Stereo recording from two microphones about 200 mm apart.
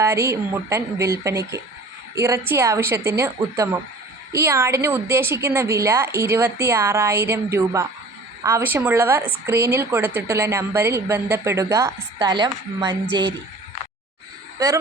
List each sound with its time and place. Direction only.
0.0 s a woman's voice: 15° right (ahead or behind)
14.6 s a woman's voice: 15° right (ahead or behind)